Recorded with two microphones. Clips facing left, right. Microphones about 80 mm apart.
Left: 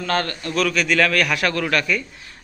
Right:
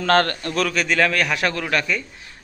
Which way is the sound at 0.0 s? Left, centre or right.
Right.